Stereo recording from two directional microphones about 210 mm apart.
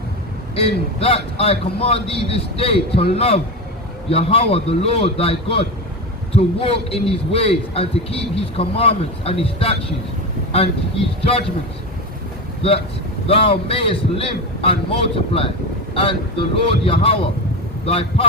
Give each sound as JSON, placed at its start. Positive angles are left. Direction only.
{"t": 0.5, "sound": "a man's voice", "side_deg": 25}
{"t": 11.3, "sound": "a man's voice", "side_deg": 25}
{"t": 13.2, "sound": "a man's voice", "side_deg": 25}